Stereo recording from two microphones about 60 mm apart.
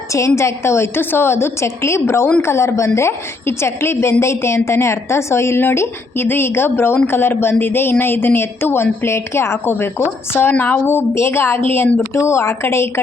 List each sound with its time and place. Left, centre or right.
0.1 s a woman's voice: left
10.5 s a woman's voice: left